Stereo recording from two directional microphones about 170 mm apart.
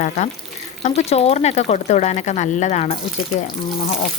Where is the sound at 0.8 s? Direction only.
40° left (ahead or behind).